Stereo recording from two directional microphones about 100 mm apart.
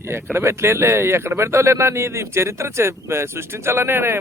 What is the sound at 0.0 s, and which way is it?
Speech, 25° right (ahead or behind).